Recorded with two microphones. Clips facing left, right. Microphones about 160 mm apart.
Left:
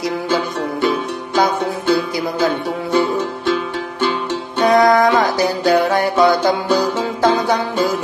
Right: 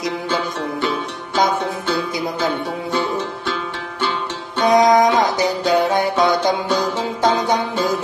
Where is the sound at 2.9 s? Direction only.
40° left (ahead or behind).